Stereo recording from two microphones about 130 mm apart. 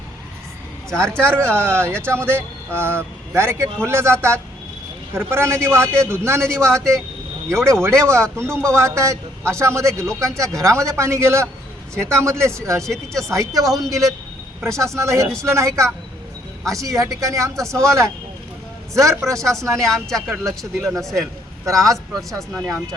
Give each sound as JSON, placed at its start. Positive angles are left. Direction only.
{"t": 0.9, "sound": "a man's voice", "side_deg": -20}
{"t": 12.8, "sound": "speech", "side_deg": 5}
{"t": 13.2, "sound": "a man's voice", "side_deg": -25}
{"t": 19.8, "sound": "speech", "side_deg": 5}
{"t": 21.8, "sound": "a man's voice", "side_deg": -25}
{"t": 22.5, "sound": "speech", "side_deg": 0}